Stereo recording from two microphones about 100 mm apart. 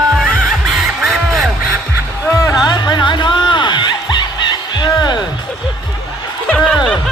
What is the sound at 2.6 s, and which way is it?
Music, 45° left (ahead or behind).